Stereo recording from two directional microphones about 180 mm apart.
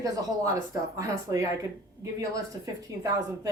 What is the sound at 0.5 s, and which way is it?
A woman's voice, 20° right (ahead or behind).